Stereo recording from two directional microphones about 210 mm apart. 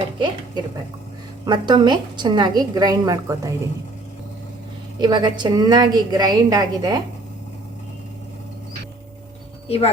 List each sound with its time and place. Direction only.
0.6 s a woman's voice: 20° right (ahead or behind)
4.9 s a woman's voice: 20° right (ahead or behind)
9.6 s speech: 30° left (ahead or behind)